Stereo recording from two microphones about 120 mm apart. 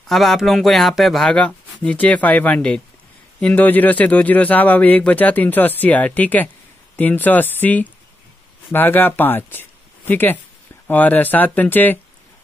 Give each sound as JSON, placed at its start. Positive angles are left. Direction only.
{"t": 0.1, "sound": "a man's voice", "side_deg": 0}